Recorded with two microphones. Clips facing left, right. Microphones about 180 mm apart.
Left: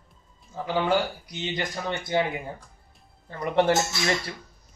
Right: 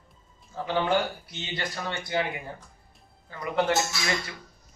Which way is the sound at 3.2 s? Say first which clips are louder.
Left 4 dB; 35° left (ahead or behind).